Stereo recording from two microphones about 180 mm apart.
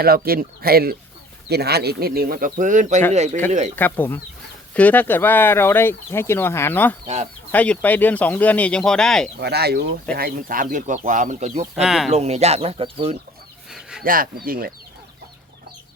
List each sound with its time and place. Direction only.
0.0 s speech: 55° right (ahead or behind); by 3.4 s 40° right (ahead or behind)
3.8 s speech: 10° left (ahead or behind)
9.4 s speech: 65° right (ahead or behind); by 11.6 s 40° right (ahead or behind)
11.7 s speech: centre (ahead or behind)
12.1 s speech: 35° right (ahead or behind)
13.7 s a sound: 5° right (ahead or behind)
14.0 s speech: 50° right (ahead or behind)